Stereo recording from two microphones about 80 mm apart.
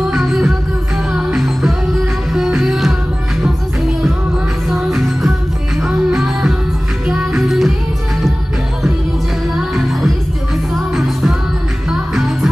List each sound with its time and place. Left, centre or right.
0.1 s music: centre
11.9 s music: centre